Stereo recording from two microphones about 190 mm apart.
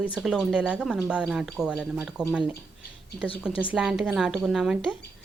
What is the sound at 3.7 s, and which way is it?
Speech, 5° right (ahead or behind).